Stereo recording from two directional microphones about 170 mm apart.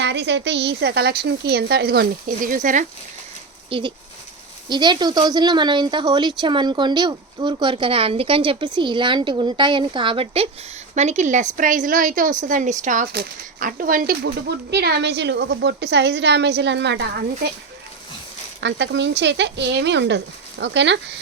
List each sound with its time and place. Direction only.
0.0 s a woman's voice: 90° right; by 2.8 s 50° right (ahead or behind)
3.7 s a woman's voice: 30° right (ahead or behind); by 17.5 s 85° right
18.6 s speech: 90° right